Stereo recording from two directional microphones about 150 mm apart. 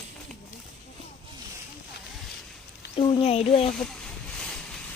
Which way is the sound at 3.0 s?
40° left (ahead or behind).